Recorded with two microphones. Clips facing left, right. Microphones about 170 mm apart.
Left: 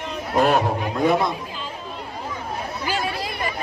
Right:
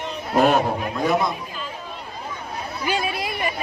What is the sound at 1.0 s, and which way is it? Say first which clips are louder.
Speech: left 2 dB; 25° left (ahead or behind).